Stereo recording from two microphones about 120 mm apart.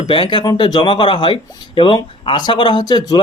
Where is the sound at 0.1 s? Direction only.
45° left (ahead or behind).